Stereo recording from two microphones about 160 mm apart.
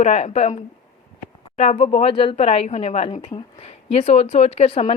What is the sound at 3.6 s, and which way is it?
Speech, 40° left (ahead or behind).